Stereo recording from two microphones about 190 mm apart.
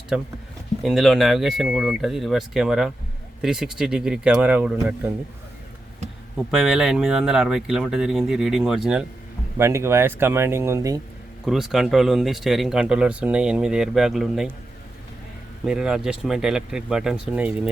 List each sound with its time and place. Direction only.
0.1 s speech: 5° right (ahead or behind)
6.3 s speech: centre (ahead or behind)
9.6 s speech: 15° right (ahead or behind)
11.4 s speech: centre (ahead or behind)
15.6 s speech: 5° right (ahead or behind)